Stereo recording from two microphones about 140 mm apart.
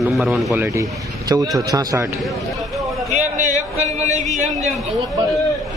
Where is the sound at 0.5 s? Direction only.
20° right (ahead or behind).